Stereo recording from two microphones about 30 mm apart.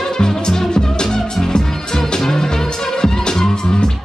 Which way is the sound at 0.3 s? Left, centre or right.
Centre.